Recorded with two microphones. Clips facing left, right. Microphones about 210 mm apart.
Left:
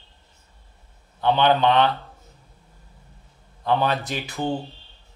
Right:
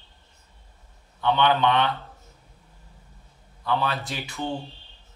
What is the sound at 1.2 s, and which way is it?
Speech, 30° left (ahead or behind).